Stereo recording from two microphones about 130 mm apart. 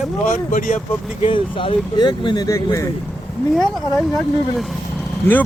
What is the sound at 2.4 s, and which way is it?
Speech, 25° left (ahead or behind).